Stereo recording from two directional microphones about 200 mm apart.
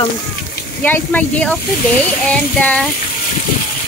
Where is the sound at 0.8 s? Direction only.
10° left (ahead or behind).